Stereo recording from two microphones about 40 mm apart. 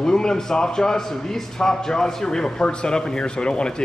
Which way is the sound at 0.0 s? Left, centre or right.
Centre.